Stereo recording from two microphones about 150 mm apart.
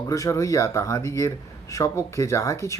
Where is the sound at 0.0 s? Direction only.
20° left (ahead or behind).